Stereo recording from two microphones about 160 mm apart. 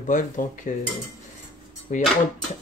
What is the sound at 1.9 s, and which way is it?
Speech, 50° left (ahead or behind).